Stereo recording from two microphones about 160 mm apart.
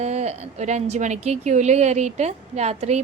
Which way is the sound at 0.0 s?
45° right (ahead or behind).